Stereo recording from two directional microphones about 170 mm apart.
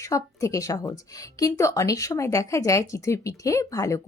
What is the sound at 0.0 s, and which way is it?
Speech, 20° left (ahead or behind).